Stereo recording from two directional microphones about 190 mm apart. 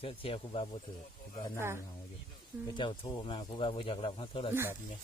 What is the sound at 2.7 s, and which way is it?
Speech, 25° left (ahead or behind).